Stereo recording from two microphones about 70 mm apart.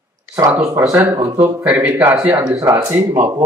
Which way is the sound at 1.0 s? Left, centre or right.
Right.